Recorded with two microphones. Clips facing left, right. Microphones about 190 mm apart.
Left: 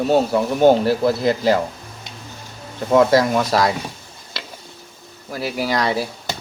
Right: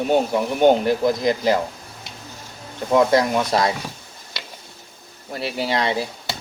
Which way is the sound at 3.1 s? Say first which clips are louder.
Left 2 dB; 20° right (ahead or behind).